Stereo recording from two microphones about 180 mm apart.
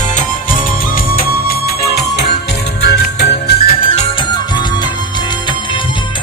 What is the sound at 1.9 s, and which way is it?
Music, 60° left (ahead or behind).